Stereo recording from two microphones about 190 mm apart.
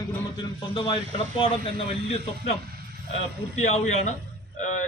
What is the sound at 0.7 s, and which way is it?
Speech, 25° left (ahead or behind).